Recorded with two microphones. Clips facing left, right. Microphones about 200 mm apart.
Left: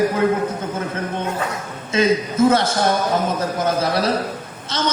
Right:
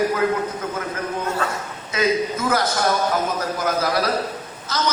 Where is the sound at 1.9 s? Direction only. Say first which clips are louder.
Left 3 dB; 25° left (ahead or behind).